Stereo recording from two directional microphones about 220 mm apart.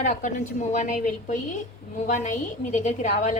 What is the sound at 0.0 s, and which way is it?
A woman's voice, 35° left (ahead or behind).